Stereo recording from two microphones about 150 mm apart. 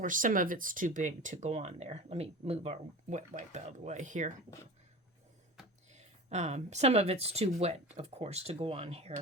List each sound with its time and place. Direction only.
0.0 s speech: 60° right (ahead or behind)
5.9 s speech: 50° right (ahead or behind)